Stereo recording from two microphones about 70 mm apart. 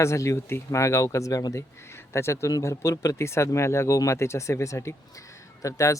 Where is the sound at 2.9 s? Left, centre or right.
Left.